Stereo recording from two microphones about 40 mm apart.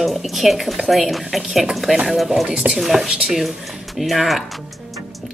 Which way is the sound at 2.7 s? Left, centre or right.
Right.